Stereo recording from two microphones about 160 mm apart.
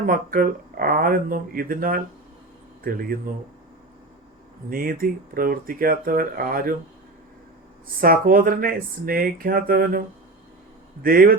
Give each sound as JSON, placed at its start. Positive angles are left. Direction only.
{"t": 0.0, "sound": "speech", "side_deg": -60}
{"t": 4.7, "sound": "speech", "side_deg": -65}
{"t": 8.0, "sound": "speech", "side_deg": -65}
{"t": 11.0, "sound": "speech", "side_deg": -65}